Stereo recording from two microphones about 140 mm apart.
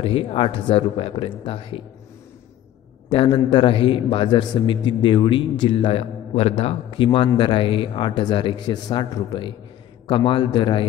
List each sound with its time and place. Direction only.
0.0 s a man's voice: 40° left (ahead or behind)
3.1 s a man's voice: 35° left (ahead or behind)